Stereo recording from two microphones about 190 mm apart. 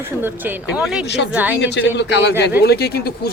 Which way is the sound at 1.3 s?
10° right (ahead or behind).